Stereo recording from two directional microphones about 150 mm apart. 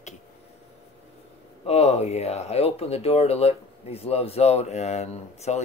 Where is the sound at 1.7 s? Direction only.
45° left (ahead or behind).